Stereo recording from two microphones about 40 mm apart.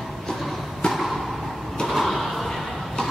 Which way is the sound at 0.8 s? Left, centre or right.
Left.